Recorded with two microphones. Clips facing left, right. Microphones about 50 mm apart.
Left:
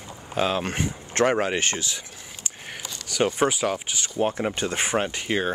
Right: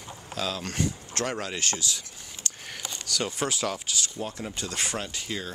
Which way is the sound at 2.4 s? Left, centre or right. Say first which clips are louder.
Left 1 dB; centre.